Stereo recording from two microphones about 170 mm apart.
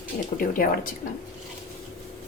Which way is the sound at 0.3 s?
55° left (ahead or behind).